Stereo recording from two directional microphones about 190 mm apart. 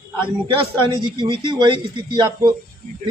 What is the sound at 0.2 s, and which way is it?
A man's voice, 25° right (ahead or behind).